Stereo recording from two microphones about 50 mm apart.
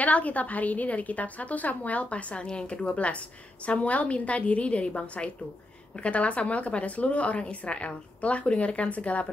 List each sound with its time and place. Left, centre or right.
0.0 s a woman's voice: left